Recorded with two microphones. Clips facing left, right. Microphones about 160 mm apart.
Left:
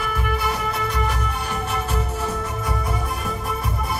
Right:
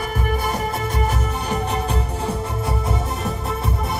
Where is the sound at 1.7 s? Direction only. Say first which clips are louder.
Right 2 dB; 35° right (ahead or behind).